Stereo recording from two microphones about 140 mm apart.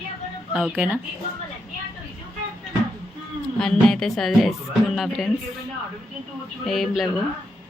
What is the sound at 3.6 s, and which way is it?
Speech, 5° left (ahead or behind).